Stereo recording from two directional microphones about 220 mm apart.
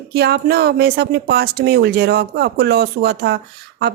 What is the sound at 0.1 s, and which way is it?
Speech, 45° right (ahead or behind).